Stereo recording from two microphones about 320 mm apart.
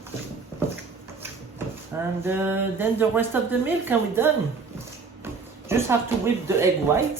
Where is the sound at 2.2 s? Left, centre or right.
Centre.